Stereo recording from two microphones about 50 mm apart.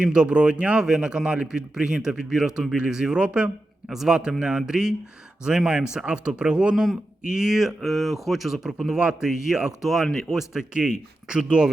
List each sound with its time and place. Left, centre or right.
0.0 s speech: centre
3.8 s speech: centre
7.8 s speech: centre
11.3 s speech: centre